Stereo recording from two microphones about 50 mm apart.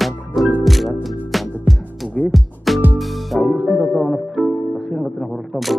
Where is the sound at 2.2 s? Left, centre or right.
Left.